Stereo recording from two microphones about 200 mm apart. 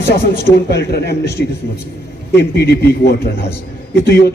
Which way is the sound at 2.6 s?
55° left (ahead or behind).